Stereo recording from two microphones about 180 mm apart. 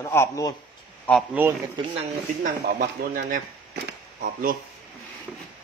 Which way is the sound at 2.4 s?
50° right (ahead or behind).